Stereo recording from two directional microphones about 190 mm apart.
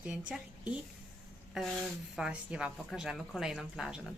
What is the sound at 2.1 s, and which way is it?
A woman's voice, 5° right (ahead or behind).